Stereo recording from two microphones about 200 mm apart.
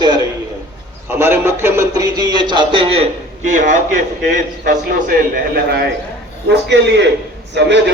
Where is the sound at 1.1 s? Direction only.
10° right (ahead or behind); by 3.0 s 25° right (ahead or behind).